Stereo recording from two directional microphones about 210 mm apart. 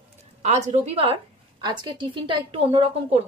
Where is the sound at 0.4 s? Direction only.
35° right (ahead or behind).